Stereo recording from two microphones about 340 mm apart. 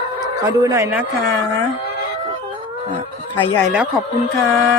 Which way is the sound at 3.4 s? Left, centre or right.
Centre.